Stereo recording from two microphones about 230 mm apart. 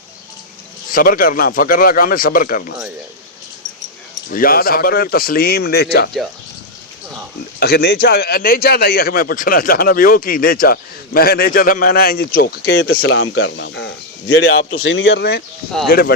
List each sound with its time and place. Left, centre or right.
0.9 s speech: left
4.3 s speech: left
7.6 s speech: left